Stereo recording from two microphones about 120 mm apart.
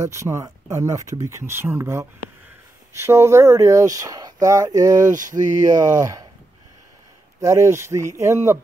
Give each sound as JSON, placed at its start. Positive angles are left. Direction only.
{"t": 0.0, "sound": "speech", "side_deg": -25}
{"t": 7.3, "sound": "speech", "side_deg": -25}